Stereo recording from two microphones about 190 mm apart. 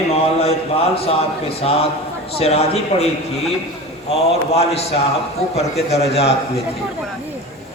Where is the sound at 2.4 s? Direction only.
35° left (ahead or behind).